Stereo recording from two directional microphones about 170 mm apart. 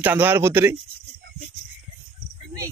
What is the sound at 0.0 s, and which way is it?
Speech, 10° right (ahead or behind).